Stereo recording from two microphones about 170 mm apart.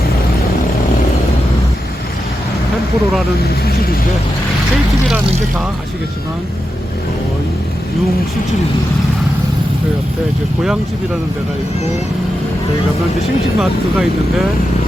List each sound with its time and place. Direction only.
5.0 s speech: centre (ahead or behind)
13.6 s speech: centre (ahead or behind)